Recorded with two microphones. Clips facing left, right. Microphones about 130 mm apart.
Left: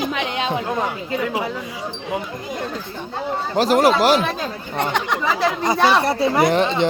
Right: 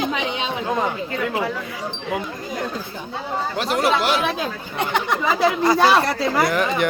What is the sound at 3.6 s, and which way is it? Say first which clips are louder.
Speech: left 7 dB; 40° left (ahead or behind).